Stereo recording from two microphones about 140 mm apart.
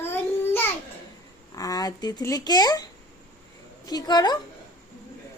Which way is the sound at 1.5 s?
25° left (ahead or behind).